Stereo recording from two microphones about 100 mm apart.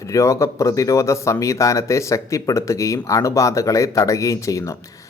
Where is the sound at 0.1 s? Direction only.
30° left (ahead or behind).